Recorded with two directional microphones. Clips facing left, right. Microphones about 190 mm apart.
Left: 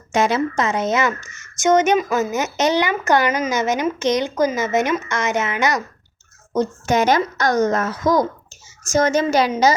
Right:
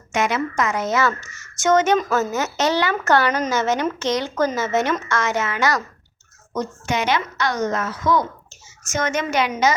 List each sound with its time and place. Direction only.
0.1 s a woman's voice: 30° left (ahead or behind)
6.8 s a woman's voice: 45° left (ahead or behind)